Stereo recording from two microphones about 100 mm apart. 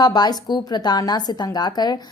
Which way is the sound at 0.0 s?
45° left (ahead or behind).